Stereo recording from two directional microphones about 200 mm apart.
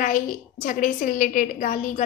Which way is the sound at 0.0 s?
40° left (ahead or behind).